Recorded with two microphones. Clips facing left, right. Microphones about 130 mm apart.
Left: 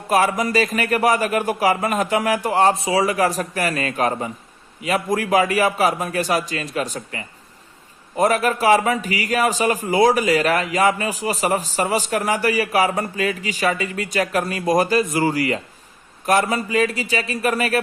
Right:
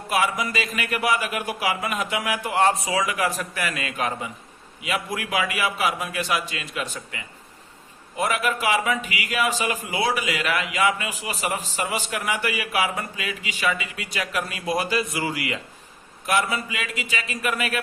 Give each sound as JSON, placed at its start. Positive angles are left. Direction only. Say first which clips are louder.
{"t": 0.1, "sound": "a man's voice", "louder": "left 6 dB", "side_deg": 40}